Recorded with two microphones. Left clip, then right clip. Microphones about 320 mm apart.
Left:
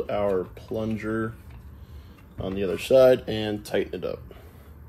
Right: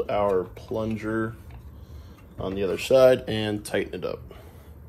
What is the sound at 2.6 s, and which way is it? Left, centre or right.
Speech, centre.